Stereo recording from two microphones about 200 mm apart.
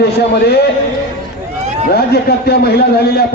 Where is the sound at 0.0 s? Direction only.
55° left (ahead or behind).